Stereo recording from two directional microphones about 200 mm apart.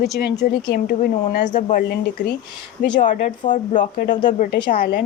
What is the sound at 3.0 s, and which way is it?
Speech, 40° left (ahead or behind).